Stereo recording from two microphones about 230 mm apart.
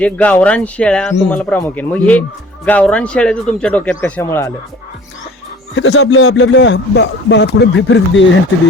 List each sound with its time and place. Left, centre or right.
0.0 s a man's voice: centre
5.7 s speech: left